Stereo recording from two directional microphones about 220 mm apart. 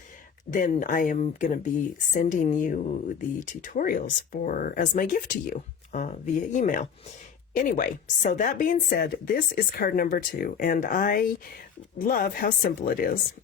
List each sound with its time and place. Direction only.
0.5 s speech: 35° left (ahead or behind)